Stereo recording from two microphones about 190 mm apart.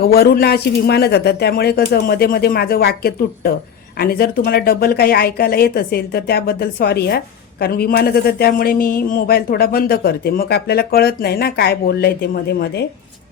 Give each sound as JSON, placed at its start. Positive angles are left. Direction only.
{"t": 0.0, "sound": "speech", "side_deg": 55}